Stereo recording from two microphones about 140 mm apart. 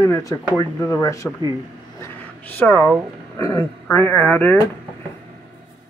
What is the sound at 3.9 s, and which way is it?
Speech, 10° left (ahead or behind).